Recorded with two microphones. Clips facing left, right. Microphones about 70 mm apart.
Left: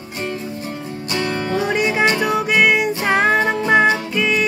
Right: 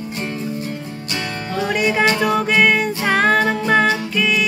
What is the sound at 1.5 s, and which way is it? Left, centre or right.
Music, centre.